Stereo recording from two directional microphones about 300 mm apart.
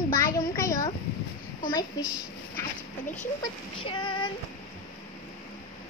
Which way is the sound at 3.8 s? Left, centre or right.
Centre.